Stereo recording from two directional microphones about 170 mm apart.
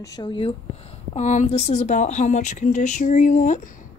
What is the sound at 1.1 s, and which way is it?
Speech, 45° left (ahead or behind).